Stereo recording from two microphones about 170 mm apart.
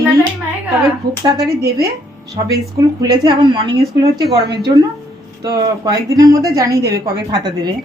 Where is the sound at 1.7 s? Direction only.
70° right (ahead or behind).